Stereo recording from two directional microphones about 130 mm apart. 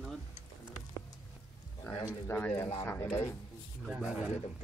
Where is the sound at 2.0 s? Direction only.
25° left (ahead or behind).